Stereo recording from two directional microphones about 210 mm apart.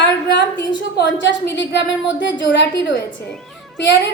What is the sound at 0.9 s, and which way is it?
A woman's voice, 55° left (ahead or behind).